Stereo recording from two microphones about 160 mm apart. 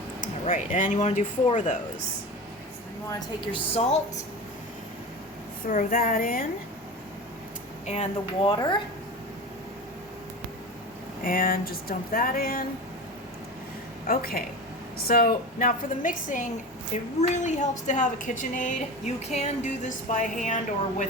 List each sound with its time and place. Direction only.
0.5 s a woman's voice: 50° left (ahead or behind)
3.1 s a woman's voice: 25° left (ahead or behind)
5.6 s speech: 60° left (ahead or behind)
7.9 s a woman's voice: 45° left (ahead or behind)
8.4 s speech: 30° left (ahead or behind)
11.2 s speech: 60° left (ahead or behind)
14.1 s a woman's voice: 65° left (ahead or behind)